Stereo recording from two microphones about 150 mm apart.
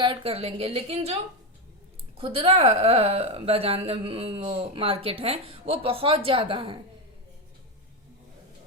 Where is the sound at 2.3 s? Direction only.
40° right (ahead or behind).